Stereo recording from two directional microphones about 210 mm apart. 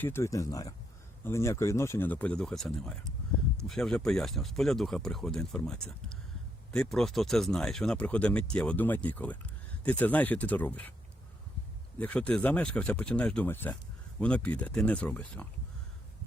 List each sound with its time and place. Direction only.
0.0 s speech: 10° left (ahead or behind)
11.9 s speech: 5° left (ahead or behind)